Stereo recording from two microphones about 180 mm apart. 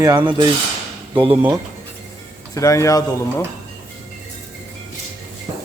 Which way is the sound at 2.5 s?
20° left (ahead or behind).